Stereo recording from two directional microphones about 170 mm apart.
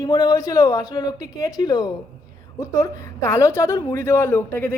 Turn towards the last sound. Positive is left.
turn(degrees=15)  # may be behind; listen again after turning